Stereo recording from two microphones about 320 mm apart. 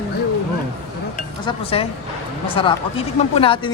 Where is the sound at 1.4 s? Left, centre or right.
Centre.